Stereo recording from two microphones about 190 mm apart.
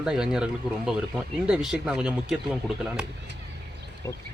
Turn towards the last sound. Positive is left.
turn(degrees=-5)  # may be behind; listen again after turning